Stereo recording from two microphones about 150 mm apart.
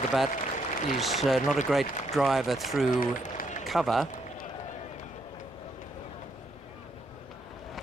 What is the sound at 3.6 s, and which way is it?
Speech, centre (ahead or behind).